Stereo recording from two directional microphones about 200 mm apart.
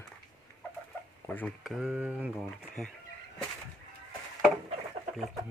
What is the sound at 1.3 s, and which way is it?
Speech, 5° left (ahead or behind).